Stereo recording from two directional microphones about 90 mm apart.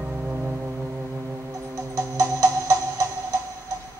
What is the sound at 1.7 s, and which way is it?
Music, 40° right (ahead or behind).